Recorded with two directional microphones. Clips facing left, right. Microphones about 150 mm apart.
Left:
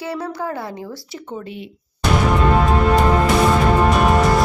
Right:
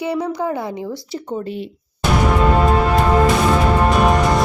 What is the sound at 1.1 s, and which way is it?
Speech, 30° right (ahead or behind).